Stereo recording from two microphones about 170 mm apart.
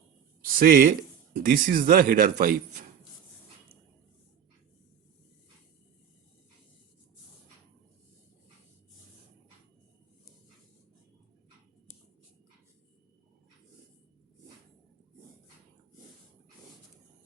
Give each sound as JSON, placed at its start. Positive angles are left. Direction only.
{"t": 0.4, "sound": "speech", "side_deg": -55}